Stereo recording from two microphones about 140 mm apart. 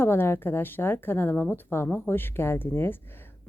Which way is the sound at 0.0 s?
15° left (ahead or behind).